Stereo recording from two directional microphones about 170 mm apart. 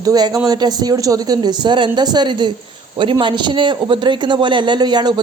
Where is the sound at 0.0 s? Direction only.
25° right (ahead or behind).